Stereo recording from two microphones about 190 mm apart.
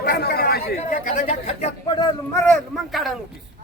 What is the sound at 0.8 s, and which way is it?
Speech, 40° left (ahead or behind).